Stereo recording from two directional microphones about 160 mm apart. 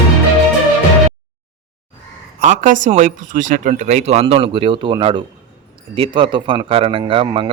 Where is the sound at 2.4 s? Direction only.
55° right (ahead or behind).